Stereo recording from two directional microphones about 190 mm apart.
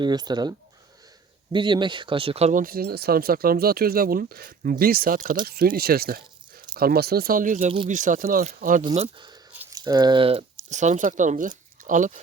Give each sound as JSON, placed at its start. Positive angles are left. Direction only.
{"t": 0.0, "sound": "speech", "side_deg": -20}
{"t": 1.5, "sound": "speech", "side_deg": -25}
{"t": 9.1, "sound": "speech", "side_deg": -25}